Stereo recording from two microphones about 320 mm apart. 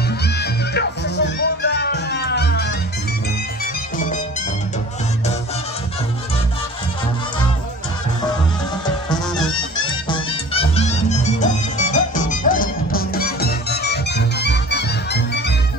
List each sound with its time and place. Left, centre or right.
0.2 s music: left
9.8 s music: centre; by 15.5 s left